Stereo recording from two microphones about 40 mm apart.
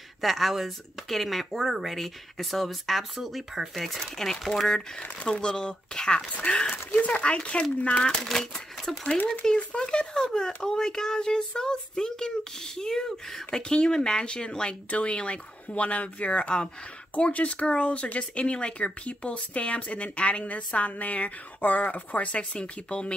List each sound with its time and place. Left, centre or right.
0.2 s speech: centre
5.2 s speech: left
8.2 s speech: centre
9.3 s speech: left